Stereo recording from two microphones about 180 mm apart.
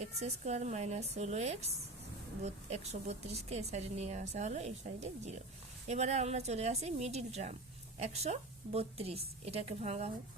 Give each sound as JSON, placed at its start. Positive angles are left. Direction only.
{"t": 0.0, "sound": "a woman's voice", "side_deg": -40}